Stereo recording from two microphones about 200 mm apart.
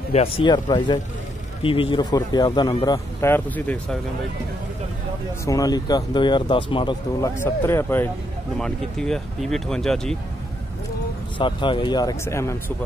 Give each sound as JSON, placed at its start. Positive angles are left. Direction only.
{"t": 0.1, "sound": "speech", "side_deg": 30}
{"t": 5.4, "sound": "speech", "side_deg": 15}
{"t": 7.3, "sound": "speech", "side_deg": 10}
{"t": 11.3, "sound": "speech", "side_deg": 25}